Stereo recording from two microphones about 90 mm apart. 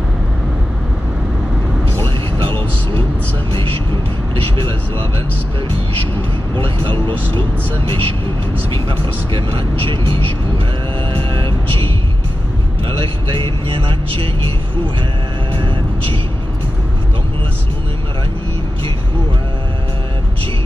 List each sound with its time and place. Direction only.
3.5 s vehicle: 90° right
6.5 s speech: 85° right
11.1 s vehicle: 85° right
13.7 s speech: 90° right